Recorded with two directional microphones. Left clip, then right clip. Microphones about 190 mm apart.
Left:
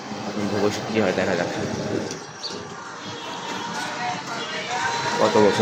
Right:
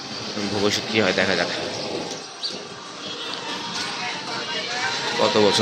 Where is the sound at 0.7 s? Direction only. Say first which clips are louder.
Right 2 dB; 5° left (ahead or behind).